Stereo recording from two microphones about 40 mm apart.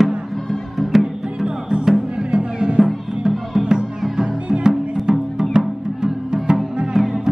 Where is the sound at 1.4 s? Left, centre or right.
Centre.